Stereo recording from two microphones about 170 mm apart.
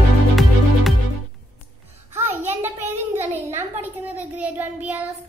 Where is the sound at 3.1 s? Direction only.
40° right (ahead or behind).